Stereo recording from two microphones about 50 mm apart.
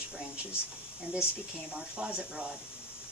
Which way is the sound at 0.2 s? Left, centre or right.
Right.